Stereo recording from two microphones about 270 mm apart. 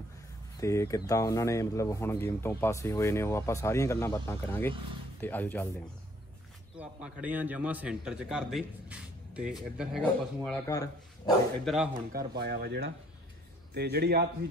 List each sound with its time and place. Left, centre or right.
0.6 s speech: centre
6.8 s a man's voice: centre
11.6 s a man's voice: centre
12.1 s speech: right